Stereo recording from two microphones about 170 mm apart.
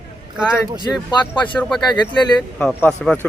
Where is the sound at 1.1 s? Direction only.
30° left (ahead or behind).